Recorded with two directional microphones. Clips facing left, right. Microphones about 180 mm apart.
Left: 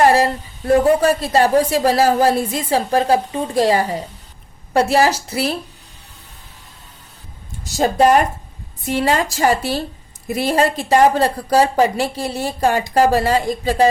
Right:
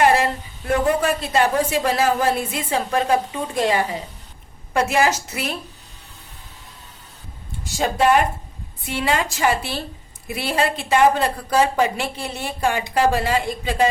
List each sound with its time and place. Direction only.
0.0 s speech: 40° left (ahead or behind)
7.6 s speech: 40° left (ahead or behind)